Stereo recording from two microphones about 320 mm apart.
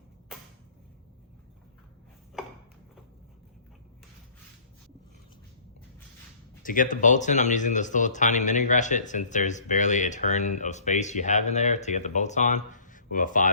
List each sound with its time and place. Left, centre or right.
6.6 s speech: left